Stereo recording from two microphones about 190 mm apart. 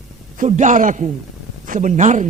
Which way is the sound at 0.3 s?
40° right (ahead or behind).